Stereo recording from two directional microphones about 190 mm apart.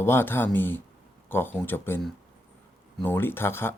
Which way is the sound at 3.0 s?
10° left (ahead or behind).